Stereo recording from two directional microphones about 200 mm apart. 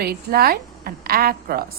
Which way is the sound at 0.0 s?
50° right (ahead or behind).